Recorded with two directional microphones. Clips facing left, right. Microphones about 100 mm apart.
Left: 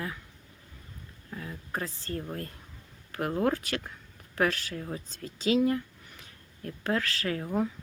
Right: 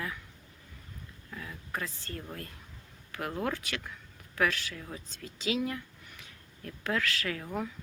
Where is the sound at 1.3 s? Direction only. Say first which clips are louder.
Left 3 dB; 30° left (ahead or behind).